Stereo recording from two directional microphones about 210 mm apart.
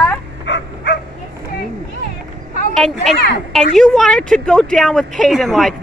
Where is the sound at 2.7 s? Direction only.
Centre (ahead or behind).